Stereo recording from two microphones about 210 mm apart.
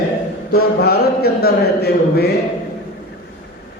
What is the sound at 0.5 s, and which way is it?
A man's voice, 50° left (ahead or behind).